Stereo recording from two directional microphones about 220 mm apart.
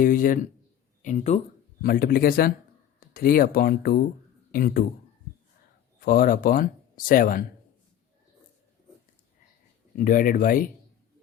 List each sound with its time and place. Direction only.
0.0 s speech: 40° left (ahead or behind)
1.8 s speech: 45° left (ahead or behind)
6.0 s speech: 40° left (ahead or behind)
10.0 s speech: 40° left (ahead or behind)